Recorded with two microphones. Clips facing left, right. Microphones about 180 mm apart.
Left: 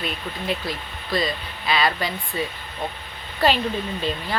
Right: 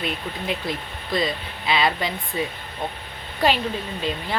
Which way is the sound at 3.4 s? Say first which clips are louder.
Left 1 dB; 15° right (ahead or behind).